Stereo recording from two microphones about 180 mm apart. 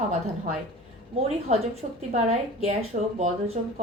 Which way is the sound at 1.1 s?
35° right (ahead or behind).